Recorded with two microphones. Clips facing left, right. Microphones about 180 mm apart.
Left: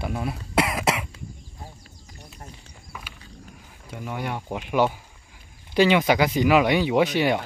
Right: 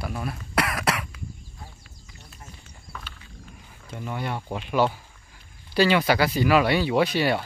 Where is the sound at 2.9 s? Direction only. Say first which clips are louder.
Even; 10° left (ahead or behind).